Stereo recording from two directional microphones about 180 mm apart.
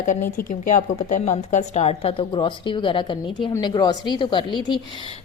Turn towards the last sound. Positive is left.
turn(degrees=25)  # may be behind; listen again after turning